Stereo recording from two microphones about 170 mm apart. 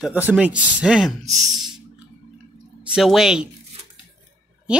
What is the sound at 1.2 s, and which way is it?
Speech, 20° right (ahead or behind).